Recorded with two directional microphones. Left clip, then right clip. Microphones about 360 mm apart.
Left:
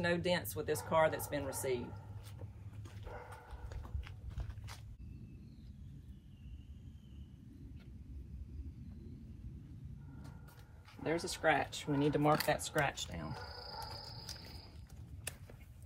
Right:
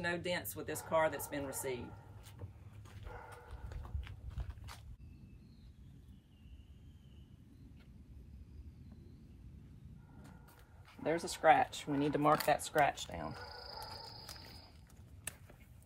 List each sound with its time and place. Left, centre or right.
0.0 s speech: centre
4.0 s horse: centre
11.1 s speech: centre